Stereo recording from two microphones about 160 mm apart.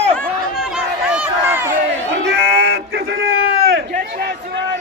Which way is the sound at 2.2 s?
90° right.